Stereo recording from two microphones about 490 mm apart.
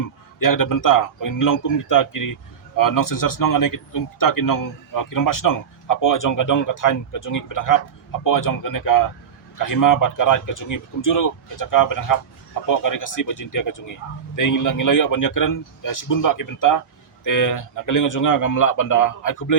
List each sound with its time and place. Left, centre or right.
0.3 s speech: left